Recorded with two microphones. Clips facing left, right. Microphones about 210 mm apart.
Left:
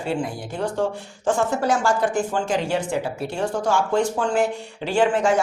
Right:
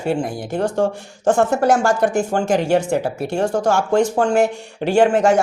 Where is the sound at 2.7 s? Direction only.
45° right (ahead or behind).